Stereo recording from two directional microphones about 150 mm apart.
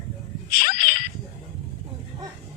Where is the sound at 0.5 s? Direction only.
80° left.